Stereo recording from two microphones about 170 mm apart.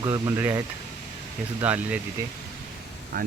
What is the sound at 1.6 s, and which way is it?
Speech, 10° right (ahead or behind).